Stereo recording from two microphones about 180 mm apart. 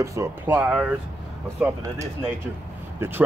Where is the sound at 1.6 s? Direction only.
15° right (ahead or behind).